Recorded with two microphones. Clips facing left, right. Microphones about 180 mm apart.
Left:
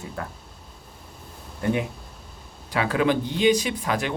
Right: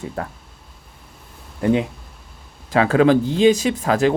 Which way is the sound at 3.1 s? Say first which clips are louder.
Right 7 dB; 90° right.